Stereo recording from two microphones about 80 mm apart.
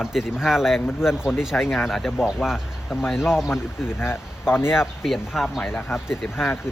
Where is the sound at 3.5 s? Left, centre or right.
Left.